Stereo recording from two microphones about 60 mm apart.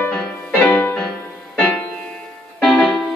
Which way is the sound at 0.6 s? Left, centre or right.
Left.